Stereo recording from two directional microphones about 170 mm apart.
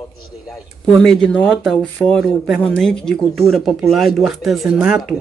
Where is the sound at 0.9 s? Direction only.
5° left (ahead or behind).